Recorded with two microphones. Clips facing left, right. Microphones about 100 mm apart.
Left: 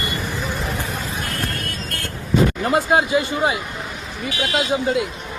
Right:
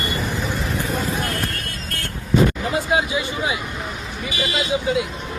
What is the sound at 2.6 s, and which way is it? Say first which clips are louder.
Speech: left 3 dB; 45° left (ahead or behind).